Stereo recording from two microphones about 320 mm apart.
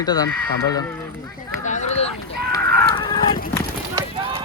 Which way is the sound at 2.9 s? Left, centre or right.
Centre.